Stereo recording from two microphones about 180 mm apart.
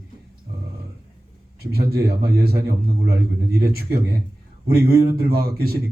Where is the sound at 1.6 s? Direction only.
60° right (ahead or behind).